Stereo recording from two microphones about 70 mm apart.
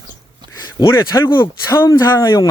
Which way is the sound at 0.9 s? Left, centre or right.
Left.